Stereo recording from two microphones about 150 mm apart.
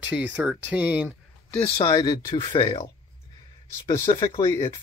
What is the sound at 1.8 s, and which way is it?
Speech, 25° left (ahead or behind).